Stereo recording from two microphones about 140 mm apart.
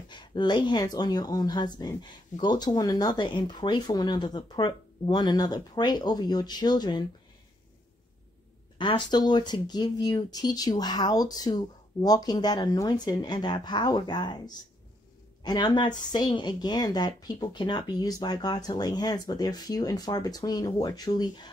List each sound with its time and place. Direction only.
0.1 s speech: 30° left (ahead or behind)
8.7 s speech: 35° left (ahead or behind)